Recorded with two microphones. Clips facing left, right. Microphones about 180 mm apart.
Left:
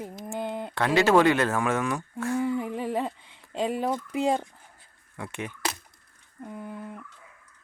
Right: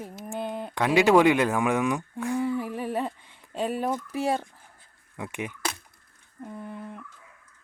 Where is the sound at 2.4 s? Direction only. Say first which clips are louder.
Even; 15° left (ahead or behind).